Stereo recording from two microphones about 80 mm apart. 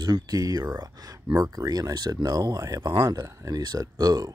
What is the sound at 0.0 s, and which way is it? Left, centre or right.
Speech, right.